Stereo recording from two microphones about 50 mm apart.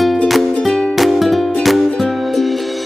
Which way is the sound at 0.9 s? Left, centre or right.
Centre.